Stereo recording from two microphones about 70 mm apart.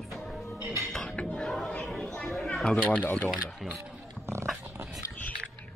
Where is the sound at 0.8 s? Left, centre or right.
Centre.